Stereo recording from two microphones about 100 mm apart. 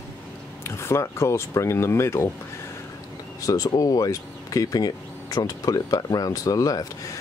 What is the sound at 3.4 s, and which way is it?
Speech, 35° left (ahead or behind).